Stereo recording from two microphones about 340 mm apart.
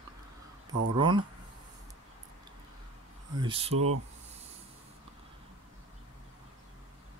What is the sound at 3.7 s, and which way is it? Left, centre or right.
Speech, right.